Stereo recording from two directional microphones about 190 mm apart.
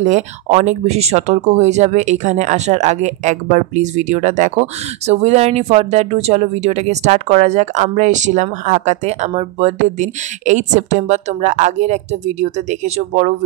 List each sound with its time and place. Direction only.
0.0 s speech: 40° right (ahead or behind)